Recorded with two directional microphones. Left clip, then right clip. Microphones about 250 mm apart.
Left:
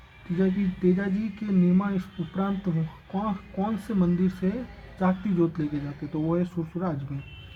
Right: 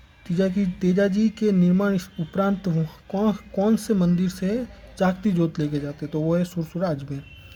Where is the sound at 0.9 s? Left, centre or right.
Right.